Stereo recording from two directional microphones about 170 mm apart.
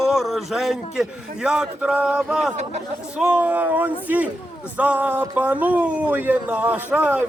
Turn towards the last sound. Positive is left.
turn(degrees=-10)  # may be behind; listen again after turning